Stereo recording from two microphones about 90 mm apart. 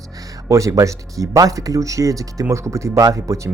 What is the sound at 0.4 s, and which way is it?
Speech, 35° right (ahead or behind).